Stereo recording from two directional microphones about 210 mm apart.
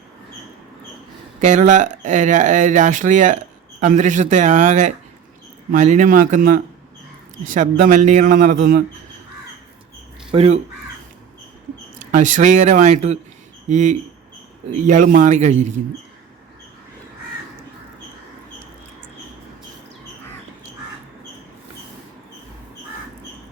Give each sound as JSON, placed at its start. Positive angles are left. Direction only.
{"t": 1.4, "sound": "speech", "side_deg": -35}
{"t": 10.3, "sound": "speech", "side_deg": -25}
{"t": 11.9, "sound": "speech", "side_deg": -35}